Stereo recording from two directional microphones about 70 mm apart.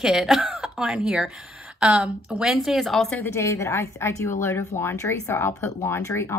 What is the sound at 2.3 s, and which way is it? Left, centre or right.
Speech, centre.